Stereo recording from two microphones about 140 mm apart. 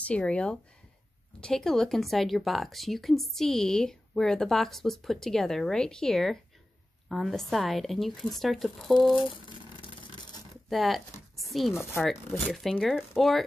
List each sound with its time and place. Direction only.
0.0 s speech: 10° left (ahead or behind)
9.2 s a sound: 35° left (ahead or behind)
10.7 s speech: centre (ahead or behind)